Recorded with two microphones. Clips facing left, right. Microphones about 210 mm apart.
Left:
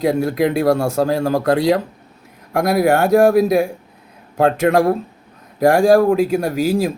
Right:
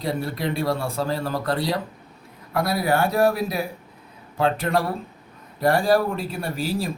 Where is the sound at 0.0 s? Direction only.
85° left.